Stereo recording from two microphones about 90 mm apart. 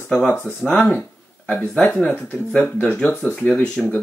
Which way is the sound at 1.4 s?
20° left (ahead or behind).